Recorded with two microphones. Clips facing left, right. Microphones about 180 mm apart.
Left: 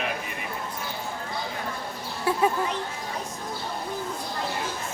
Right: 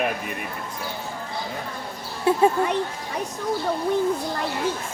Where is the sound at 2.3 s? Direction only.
25° right (ahead or behind).